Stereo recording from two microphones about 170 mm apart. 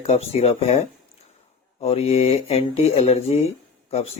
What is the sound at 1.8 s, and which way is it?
Speech, 35° left (ahead or behind).